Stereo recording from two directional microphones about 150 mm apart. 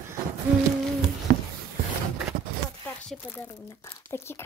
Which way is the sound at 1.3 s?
90° right.